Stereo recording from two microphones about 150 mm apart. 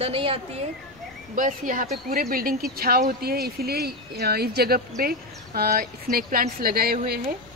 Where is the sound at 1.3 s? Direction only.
65° right (ahead or behind).